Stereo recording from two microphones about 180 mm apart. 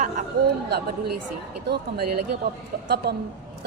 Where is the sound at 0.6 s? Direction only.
60° right (ahead or behind).